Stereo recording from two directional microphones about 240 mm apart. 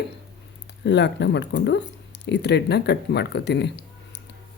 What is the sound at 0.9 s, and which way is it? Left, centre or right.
Speech, left.